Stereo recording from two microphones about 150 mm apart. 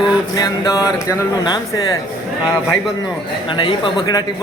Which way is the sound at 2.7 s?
Centre (ahead or behind).